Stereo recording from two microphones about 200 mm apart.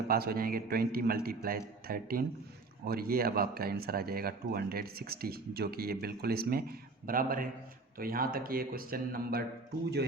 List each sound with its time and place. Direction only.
0.1 s speech: 50° right (ahead or behind)